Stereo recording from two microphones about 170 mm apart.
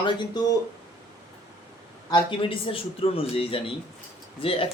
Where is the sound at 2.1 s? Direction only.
30° left (ahead or behind).